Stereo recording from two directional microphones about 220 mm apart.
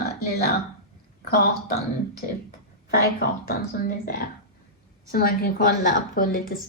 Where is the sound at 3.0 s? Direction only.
45° left (ahead or behind).